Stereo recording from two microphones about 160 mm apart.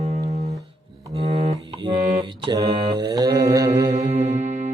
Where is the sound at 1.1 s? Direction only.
40° right (ahead or behind).